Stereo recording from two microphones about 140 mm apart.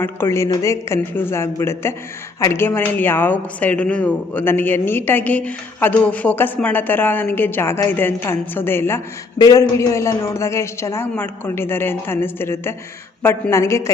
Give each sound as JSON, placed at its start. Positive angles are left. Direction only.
{"t": 0.0, "sound": "speech", "side_deg": 15}